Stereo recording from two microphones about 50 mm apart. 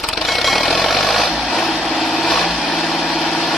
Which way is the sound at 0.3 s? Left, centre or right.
Centre.